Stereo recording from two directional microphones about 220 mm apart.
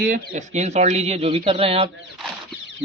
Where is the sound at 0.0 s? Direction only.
35° right (ahead or behind).